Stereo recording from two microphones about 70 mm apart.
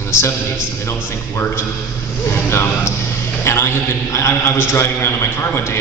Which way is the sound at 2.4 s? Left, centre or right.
Left.